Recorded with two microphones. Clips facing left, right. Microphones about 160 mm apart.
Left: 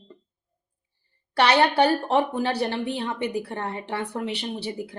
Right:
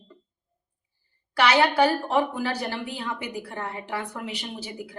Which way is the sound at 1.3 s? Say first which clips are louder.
Left 1 dB; 30° left (ahead or behind).